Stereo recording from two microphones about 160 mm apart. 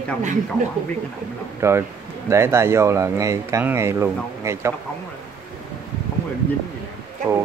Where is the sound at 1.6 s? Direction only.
15° right (ahead or behind).